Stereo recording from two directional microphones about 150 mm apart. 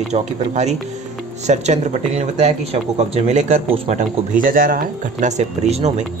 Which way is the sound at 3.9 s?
55° right (ahead or behind).